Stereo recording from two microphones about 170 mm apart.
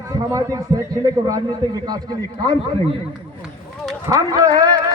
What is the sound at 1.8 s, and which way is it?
Speech, 20° right (ahead or behind).